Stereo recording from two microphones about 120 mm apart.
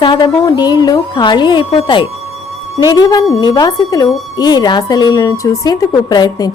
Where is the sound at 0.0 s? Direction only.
40° left (ahead or behind).